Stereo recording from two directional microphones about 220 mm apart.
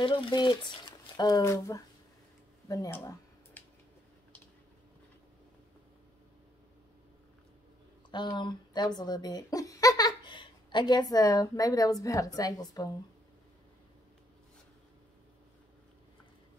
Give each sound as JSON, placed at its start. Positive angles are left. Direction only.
{"t": 0.0, "sound": "speech", "side_deg": 20}
{"t": 8.1, "sound": "speech", "side_deg": 20}